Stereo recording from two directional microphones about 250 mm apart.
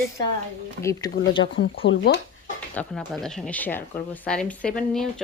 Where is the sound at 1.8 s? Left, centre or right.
Left.